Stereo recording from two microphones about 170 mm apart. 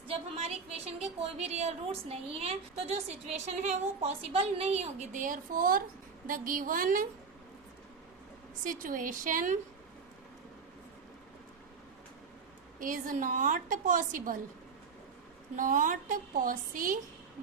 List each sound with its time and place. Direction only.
0.1 s a woman's voice: 35° right (ahead or behind); by 7.1 s 55° right (ahead or behind)
8.6 s a woman's voice: 50° right (ahead or behind)
12.8 s a woman's voice: 50° right (ahead or behind)
15.5 s a woman's voice: 50° right (ahead or behind)